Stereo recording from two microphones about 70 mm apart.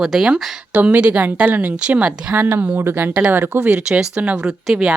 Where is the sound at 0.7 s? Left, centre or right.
Right.